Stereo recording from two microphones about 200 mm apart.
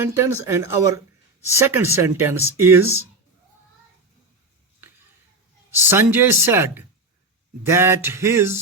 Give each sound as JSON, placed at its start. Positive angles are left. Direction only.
{"t": 0.0, "sound": "speech", "side_deg": -15}
{"t": 5.7, "sound": "speech", "side_deg": -10}